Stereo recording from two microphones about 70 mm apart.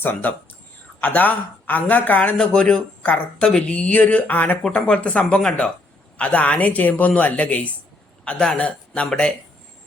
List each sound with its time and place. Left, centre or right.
0.0 s a man's voice: left; by 9.3 s centre